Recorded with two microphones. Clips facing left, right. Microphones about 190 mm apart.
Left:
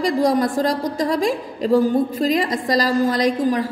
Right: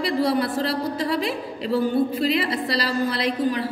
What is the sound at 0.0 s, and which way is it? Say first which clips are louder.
A woman's voice: left 4 dB; 45° left (ahead or behind).